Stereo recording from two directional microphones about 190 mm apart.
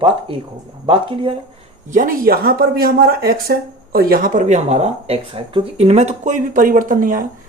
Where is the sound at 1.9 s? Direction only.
45° right (ahead or behind).